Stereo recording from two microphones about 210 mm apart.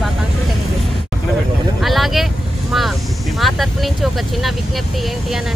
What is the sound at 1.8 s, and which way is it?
Vehicle, centre (ahead or behind).